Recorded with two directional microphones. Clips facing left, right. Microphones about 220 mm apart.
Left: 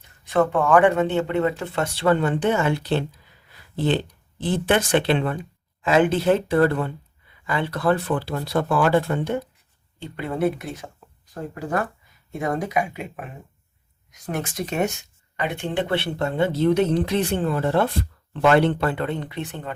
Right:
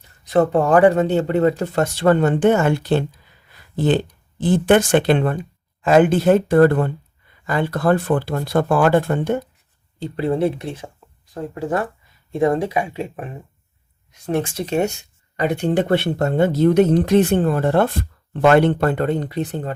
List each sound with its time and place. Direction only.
0.3 s speech: 35° right (ahead or behind)
10.0 s speech: 30° right (ahead or behind)
14.3 s speech: 30° right (ahead or behind)